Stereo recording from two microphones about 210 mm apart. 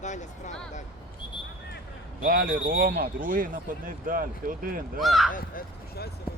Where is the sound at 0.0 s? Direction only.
35° left (ahead or behind).